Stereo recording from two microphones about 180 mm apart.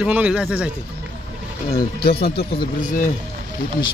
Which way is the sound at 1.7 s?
30° left (ahead or behind).